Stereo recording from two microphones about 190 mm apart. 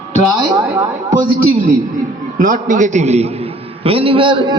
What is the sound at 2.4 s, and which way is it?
A man's voice, 45° right (ahead or behind).